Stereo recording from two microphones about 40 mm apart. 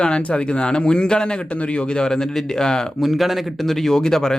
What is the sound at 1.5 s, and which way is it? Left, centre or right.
Speech, left.